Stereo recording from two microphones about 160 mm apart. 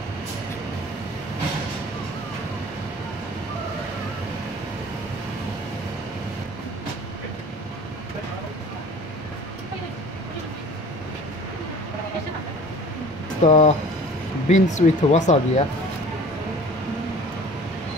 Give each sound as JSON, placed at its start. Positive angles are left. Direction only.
{"t": 13.4, "sound": "speech", "side_deg": 45}